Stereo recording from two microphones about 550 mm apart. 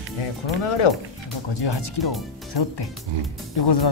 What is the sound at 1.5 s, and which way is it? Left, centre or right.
Speech, left.